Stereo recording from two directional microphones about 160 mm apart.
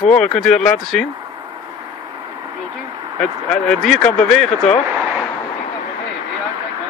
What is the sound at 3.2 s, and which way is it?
Speech, 5° left (ahead or behind).